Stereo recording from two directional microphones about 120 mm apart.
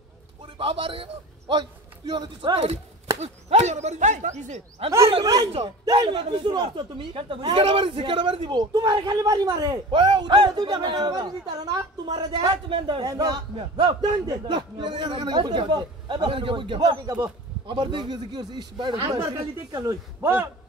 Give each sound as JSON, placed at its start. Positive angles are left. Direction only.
{"t": 0.6, "sound": "a man's voice", "side_deg": -50}
{"t": 2.5, "sound": "speech", "side_deg": -60}
{"t": 5.2, "sound": "speech", "side_deg": -35}
{"t": 5.5, "sound": "speech", "side_deg": -55}
{"t": 5.9, "sound": "speech", "side_deg": -45}
{"t": 13.0, "sound": "speech", "side_deg": -30}
{"t": 13.6, "sound": "speech", "side_deg": -45}
{"t": 14.2, "sound": "a man's voice", "side_deg": -35}